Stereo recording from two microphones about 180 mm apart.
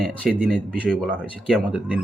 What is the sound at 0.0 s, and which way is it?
Speech, 5° right (ahead or behind).